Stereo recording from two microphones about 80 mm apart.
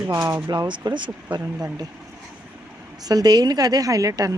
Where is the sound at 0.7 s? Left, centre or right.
Right.